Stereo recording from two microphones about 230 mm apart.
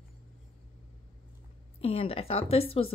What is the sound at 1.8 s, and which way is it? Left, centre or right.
Speech, left.